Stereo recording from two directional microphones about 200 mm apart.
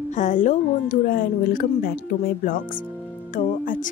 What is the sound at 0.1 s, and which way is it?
A woman's voice, 40° left (ahead or behind).